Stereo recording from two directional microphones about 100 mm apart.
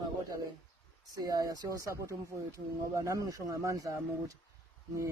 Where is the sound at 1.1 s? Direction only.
40° right (ahead or behind).